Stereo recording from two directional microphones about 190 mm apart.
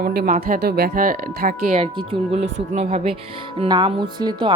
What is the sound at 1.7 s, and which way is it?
A woman's voice, 30° right (ahead or behind).